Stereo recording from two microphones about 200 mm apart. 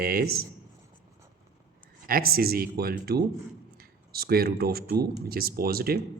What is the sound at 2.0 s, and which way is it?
Speech, 50° right (ahead or behind).